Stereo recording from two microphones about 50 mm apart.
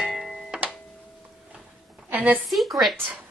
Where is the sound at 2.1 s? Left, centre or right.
Right.